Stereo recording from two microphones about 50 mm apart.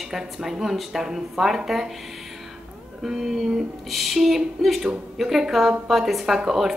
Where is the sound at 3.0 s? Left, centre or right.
Centre.